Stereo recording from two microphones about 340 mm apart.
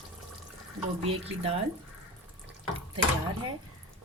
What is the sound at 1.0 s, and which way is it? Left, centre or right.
Speech, centre.